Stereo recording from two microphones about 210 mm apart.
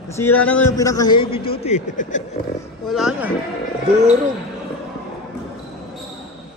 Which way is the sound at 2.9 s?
5° right (ahead or behind).